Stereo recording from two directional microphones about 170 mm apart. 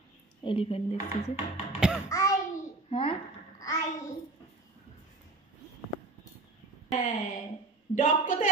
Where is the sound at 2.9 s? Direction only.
30° left (ahead or behind).